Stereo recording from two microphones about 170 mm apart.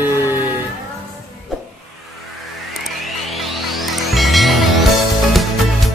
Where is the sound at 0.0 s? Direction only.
15° right (ahead or behind).